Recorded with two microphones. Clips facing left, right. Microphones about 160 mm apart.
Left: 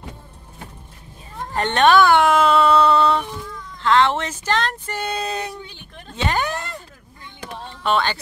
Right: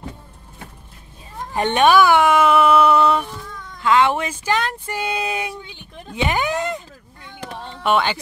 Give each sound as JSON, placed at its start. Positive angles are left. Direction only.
{"t": 1.5, "sound": "speech", "side_deg": -15}